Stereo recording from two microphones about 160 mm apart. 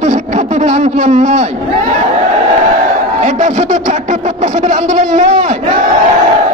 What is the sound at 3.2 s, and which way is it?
A man's voice, 50° right (ahead or behind).